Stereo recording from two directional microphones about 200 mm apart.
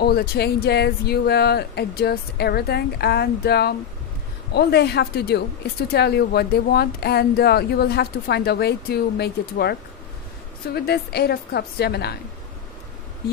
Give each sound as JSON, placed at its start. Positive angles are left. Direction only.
{"t": 0.0, "sound": "speech", "side_deg": 50}